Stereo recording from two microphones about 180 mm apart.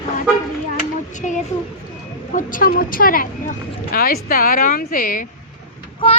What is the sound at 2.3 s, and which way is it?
A woman's voice, 50° left (ahead or behind).